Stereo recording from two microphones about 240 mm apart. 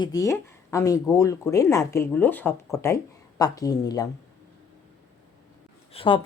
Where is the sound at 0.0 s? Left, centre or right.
Centre.